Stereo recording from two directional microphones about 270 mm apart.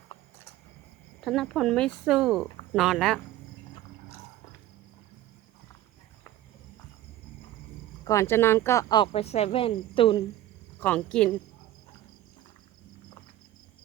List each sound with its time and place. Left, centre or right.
1.2 s speech: centre
8.0 s speech: centre
10.8 s speech: centre